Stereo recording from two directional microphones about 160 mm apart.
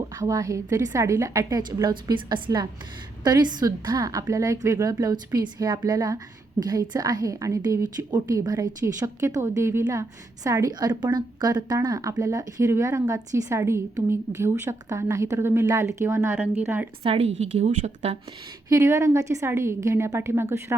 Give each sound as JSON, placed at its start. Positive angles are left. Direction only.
{"t": 0.2, "sound": "a woman's voice", "side_deg": -20}
{"t": 17.0, "sound": "a woman's voice", "side_deg": -40}
{"t": 18.7, "sound": "a woman's voice", "side_deg": -20}